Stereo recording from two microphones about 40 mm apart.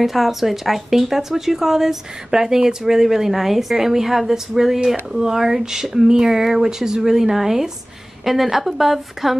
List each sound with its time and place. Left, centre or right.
0.0 s a woman's voice: centre